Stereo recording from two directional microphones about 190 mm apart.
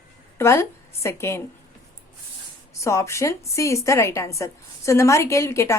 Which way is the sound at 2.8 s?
15° left (ahead or behind).